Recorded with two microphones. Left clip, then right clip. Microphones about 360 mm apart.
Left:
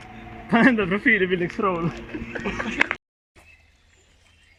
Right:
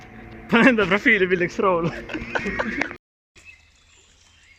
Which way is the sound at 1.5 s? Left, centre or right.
Centre.